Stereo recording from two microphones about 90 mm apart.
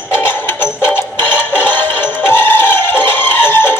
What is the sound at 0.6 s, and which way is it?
Music, 20° left (ahead or behind).